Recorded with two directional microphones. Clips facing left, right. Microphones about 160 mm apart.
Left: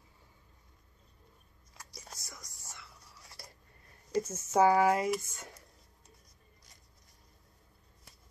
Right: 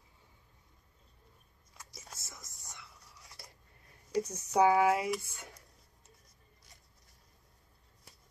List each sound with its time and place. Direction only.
2.1 s whispering: 25° right (ahead or behind)
4.1 s speech: 15° right (ahead or behind)